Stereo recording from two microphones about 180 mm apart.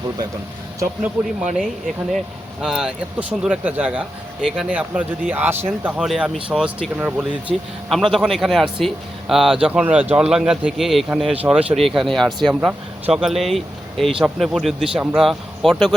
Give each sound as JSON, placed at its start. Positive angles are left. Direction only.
{"t": 0.8, "sound": "speech", "side_deg": -10}